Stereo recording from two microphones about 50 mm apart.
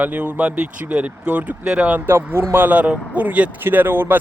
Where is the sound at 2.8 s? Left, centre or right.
Right.